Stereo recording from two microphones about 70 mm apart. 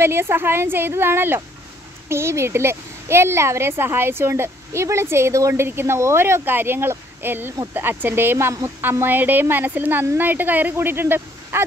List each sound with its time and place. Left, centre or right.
0.0 s a woman's voice: right